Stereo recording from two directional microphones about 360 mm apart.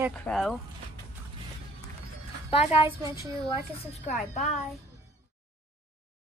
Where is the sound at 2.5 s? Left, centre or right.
Centre.